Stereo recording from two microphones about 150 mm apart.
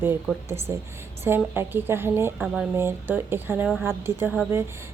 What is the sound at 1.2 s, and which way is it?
A woman's voice, 15° right (ahead or behind).